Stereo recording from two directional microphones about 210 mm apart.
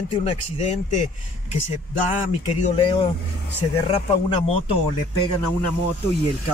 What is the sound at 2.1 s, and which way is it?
Speech, 30° left (ahead or behind).